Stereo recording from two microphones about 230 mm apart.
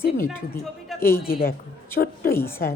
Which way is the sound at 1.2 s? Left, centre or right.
Left.